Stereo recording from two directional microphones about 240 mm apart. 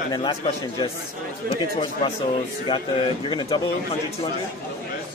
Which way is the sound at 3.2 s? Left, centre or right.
Centre.